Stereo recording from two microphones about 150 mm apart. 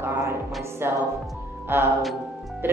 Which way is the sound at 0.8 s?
15° right (ahead or behind).